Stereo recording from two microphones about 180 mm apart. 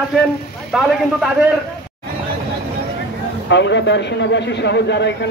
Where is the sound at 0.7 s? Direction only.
Centre (ahead or behind).